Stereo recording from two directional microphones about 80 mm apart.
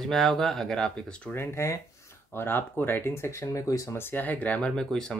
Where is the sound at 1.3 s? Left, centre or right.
Left.